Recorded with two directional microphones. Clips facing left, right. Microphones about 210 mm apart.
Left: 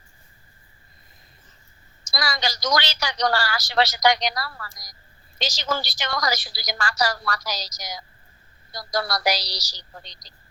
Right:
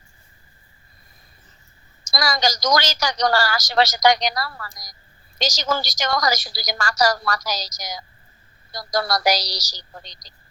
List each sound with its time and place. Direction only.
2.0 s a woman's voice: 45° right (ahead or behind)